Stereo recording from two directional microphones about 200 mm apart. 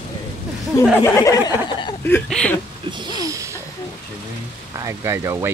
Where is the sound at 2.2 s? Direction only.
5° left (ahead or behind).